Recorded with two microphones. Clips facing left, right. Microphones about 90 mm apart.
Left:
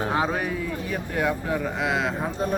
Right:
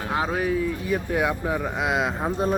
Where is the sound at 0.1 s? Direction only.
Centre (ahead or behind).